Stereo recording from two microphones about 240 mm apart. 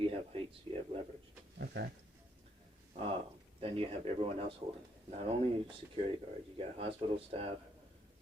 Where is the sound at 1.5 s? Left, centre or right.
Right.